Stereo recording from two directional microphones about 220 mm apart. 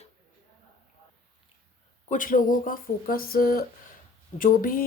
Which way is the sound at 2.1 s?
40° left (ahead or behind).